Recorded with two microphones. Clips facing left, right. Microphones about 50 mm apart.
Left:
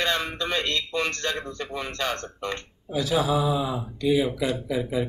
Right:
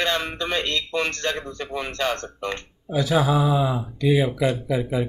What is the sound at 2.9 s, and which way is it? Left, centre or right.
Speech, right.